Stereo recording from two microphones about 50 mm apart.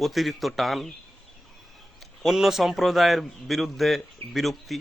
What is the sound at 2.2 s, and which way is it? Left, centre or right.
A man's voice, centre.